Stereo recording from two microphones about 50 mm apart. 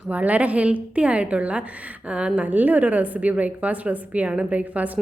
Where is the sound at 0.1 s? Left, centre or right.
Right.